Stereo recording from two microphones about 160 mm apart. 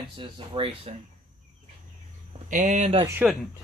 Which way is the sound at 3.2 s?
15° right (ahead or behind).